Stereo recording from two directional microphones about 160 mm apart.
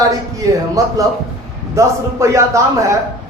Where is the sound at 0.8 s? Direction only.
20° right (ahead or behind).